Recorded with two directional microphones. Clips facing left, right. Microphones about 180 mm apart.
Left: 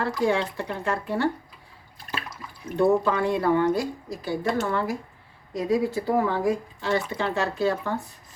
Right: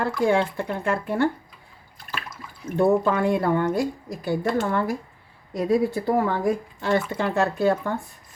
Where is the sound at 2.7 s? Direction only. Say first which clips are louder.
Right 1 dB; 50° right (ahead or behind).